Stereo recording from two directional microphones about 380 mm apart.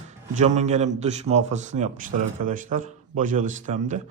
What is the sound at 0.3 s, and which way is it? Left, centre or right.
A man's voice, centre.